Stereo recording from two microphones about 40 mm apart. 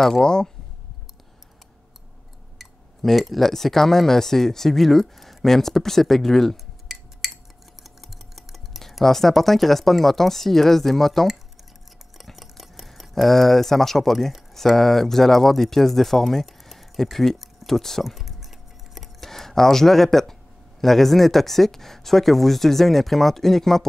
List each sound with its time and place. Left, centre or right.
0.2 s speech: centre
2.6 s speech: centre
12.2 s a sound: centre
14.5 s speech: centre
18.0 s a sound: centre
20.8 s speech: centre